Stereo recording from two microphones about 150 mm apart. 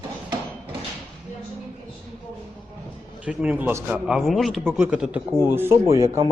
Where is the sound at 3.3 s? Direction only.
10° right (ahead or behind).